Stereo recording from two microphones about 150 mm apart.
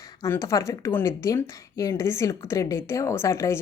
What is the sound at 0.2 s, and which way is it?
A woman's voice, 20° left (ahead or behind).